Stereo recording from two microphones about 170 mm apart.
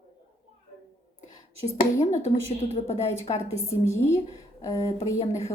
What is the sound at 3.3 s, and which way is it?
Speech, 30° left (ahead or behind).